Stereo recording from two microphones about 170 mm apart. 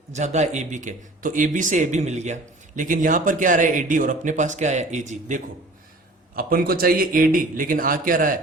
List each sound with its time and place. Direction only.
0.1 s speech: 45° right (ahead or behind)
6.3 s a man's voice: 60° right (ahead or behind)